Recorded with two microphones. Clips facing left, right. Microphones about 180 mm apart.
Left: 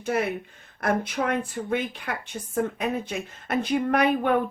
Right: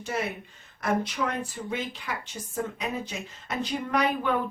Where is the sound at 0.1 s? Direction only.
60° left (ahead or behind).